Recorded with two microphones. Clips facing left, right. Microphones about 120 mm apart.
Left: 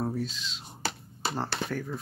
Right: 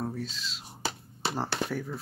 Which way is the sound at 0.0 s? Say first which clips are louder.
Left 3 dB; 5° left (ahead or behind).